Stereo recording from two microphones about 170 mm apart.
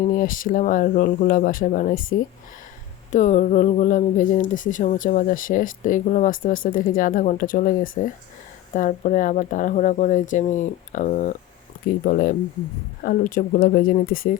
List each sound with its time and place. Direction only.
0.0 s speech: 55° left (ahead or behind)
3.1 s speech: 45° left (ahead or behind)